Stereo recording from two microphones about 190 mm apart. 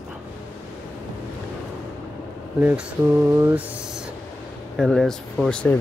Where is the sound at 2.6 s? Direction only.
10° right (ahead or behind).